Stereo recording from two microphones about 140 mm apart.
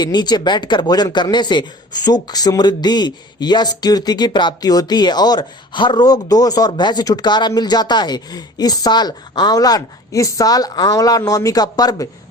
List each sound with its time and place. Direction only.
0.0 s speech: 30° left (ahead or behind)